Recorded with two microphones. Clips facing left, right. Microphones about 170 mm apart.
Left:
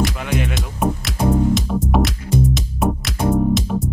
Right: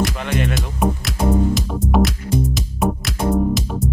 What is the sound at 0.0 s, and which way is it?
Music, 10° left (ahead or behind).